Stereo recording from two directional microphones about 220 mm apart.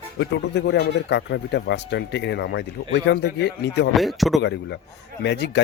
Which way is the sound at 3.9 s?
Centre (ahead or behind).